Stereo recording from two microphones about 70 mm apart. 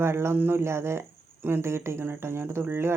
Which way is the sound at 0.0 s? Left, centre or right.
Right.